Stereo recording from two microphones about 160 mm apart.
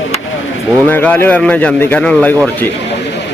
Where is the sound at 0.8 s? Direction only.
10° left (ahead or behind).